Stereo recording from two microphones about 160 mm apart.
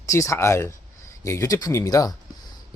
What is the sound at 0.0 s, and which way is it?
Speech, 20° left (ahead or behind).